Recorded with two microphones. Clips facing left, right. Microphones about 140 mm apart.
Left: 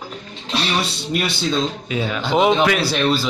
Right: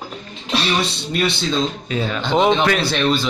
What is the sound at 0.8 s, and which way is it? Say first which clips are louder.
Speech: right 1 dB; 10° left (ahead or behind).